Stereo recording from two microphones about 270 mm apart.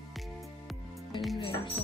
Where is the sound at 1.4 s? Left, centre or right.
Left.